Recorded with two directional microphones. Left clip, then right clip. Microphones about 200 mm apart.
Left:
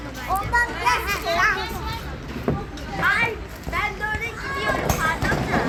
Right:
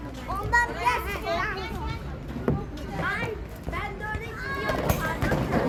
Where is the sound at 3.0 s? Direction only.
20° right (ahead or behind).